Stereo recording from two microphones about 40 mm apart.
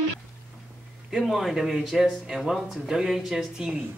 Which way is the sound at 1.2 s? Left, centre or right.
Centre.